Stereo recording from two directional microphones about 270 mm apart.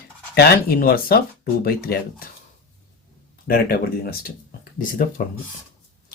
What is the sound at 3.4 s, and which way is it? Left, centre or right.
Speech, left.